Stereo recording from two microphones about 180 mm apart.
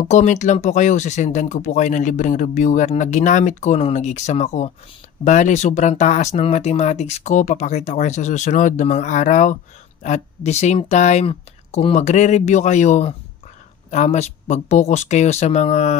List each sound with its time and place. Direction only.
0.0 s speech: 40° left (ahead or behind)